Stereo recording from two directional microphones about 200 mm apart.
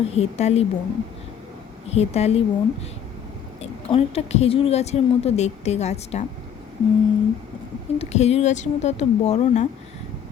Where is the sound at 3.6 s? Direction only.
30° left (ahead or behind).